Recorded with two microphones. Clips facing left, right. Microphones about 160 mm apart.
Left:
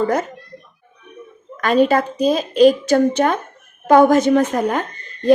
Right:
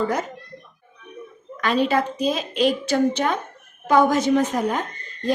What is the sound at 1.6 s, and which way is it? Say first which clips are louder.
A woman's voice: left 5 dB; 45° left (ahead or behind).